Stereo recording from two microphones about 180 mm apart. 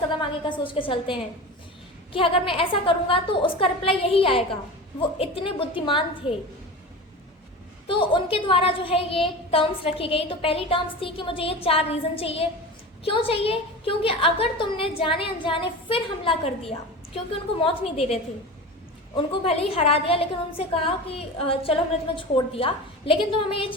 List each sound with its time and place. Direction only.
0.2 s a woman's voice: 25° left (ahead or behind)
7.9 s a woman's voice: 30° left (ahead or behind)